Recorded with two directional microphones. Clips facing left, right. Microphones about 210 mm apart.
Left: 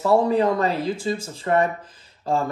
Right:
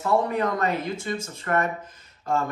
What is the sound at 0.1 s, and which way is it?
Speech, 30° left (ahead or behind).